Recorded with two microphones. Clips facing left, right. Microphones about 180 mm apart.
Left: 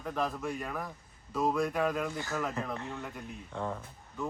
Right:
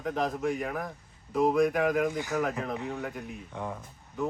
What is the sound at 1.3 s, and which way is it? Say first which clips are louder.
Speech: right 6 dB; 15° right (ahead or behind).